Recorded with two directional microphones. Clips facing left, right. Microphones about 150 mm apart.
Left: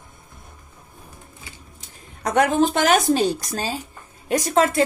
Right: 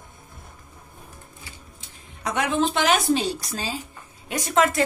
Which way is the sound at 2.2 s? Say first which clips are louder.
Left 5 dB; 45° left (ahead or behind).